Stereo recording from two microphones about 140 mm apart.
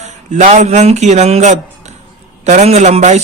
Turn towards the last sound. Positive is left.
turn(degrees=-55)  # may be behind; listen again after turning